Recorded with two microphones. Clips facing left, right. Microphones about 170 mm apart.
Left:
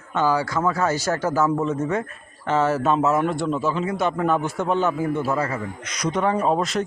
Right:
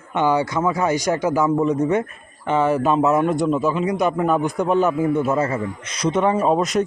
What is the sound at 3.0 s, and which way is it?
Speech, 15° right (ahead or behind).